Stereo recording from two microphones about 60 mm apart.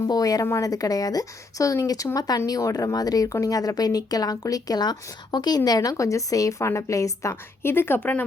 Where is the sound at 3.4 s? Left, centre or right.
Left.